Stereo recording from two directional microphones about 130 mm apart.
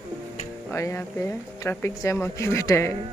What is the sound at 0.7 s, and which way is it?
Speech, 20° left (ahead or behind).